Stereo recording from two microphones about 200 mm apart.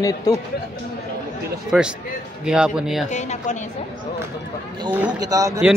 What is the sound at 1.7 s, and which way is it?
A man's voice, 5° right (ahead or behind).